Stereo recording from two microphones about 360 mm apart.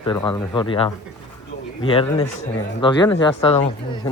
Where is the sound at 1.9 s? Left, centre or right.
Centre.